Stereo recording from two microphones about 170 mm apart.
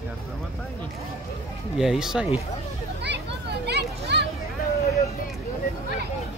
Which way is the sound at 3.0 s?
90° right.